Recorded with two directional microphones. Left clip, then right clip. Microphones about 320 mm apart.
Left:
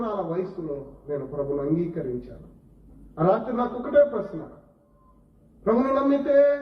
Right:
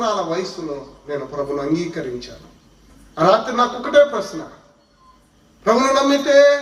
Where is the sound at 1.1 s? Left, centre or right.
Right.